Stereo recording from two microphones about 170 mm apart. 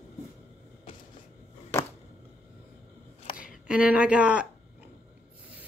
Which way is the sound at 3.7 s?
10° right (ahead or behind).